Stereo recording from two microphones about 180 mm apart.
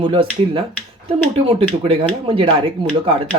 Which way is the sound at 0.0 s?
30° right (ahead or behind).